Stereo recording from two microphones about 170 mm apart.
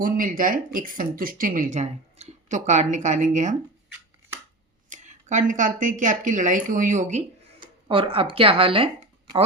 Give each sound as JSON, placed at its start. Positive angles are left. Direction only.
{"t": 0.0, "sound": "speech", "side_deg": -55}
{"t": 4.9, "sound": "speech", "side_deg": -45}
{"t": 7.6, "sound": "speech", "side_deg": -30}